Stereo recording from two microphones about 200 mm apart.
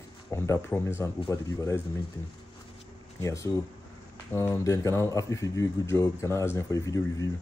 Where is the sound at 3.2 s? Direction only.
15° left (ahead or behind).